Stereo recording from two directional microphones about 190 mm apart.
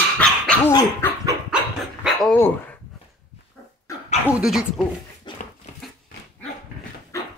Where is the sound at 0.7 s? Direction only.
15° left (ahead or behind).